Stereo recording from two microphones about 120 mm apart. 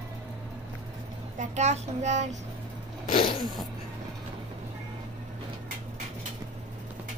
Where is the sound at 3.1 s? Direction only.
90° left.